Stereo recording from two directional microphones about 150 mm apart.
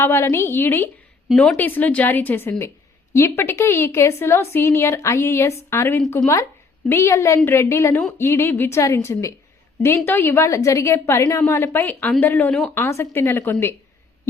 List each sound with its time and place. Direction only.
0.0 s a woman's voice: 15° left (ahead or behind)
1.3 s a woman's voice: 5° left (ahead or behind)